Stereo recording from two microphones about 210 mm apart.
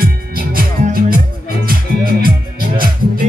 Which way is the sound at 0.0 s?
45° right (ahead or behind).